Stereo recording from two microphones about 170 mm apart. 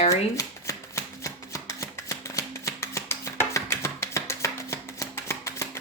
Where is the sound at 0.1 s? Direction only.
20° left (ahead or behind).